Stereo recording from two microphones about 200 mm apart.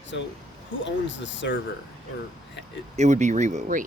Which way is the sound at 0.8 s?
65° left (ahead or behind).